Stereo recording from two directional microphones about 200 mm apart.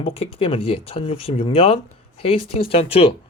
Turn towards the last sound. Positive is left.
turn(degrees=30)  # may be behind; listen again after turning